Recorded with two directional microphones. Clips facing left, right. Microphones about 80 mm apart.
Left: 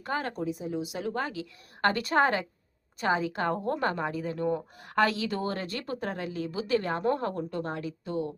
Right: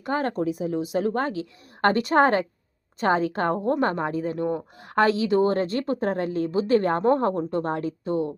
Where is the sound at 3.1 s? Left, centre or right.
Right.